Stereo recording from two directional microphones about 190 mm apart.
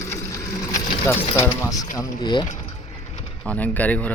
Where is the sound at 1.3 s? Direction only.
15° left (ahead or behind).